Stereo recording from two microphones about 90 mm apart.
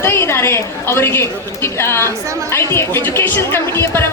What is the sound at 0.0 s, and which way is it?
A woman's voice, 30° left (ahead or behind).